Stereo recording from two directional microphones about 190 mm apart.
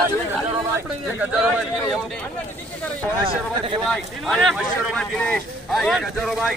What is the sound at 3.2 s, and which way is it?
Speech, 25° right (ahead or behind).